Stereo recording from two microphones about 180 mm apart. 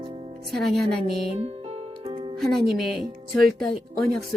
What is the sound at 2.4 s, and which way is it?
Speech, centre (ahead or behind).